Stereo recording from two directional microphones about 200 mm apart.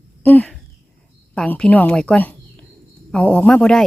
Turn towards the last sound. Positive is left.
turn(degrees=5)  # may be behind; listen again after turning